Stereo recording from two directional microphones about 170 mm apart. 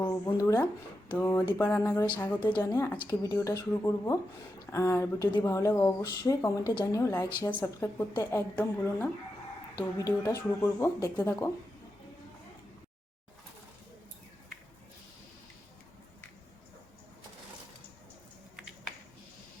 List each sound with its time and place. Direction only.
0.0 s a woman's voice: 20° left (ahead or behind)